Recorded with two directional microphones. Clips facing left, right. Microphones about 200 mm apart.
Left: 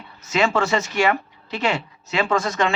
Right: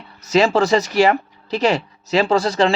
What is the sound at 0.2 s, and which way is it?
Speech, 35° right (ahead or behind).